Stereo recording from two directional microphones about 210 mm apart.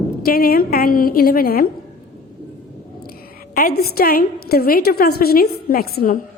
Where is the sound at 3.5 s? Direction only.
45° left (ahead or behind).